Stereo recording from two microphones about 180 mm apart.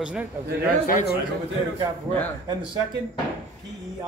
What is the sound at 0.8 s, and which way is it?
Speech, 55° left (ahead or behind).